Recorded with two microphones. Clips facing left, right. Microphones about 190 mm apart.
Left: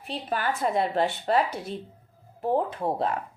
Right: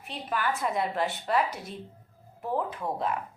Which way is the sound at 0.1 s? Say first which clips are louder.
Left 2 dB; 30° left (ahead or behind).